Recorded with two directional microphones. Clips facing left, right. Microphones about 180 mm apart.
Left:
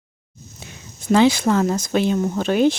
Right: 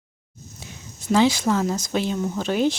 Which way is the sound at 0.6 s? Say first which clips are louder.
Left 5 dB; 60° left (ahead or behind).